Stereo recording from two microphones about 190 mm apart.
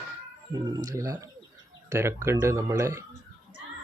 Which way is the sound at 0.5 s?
20° right (ahead or behind).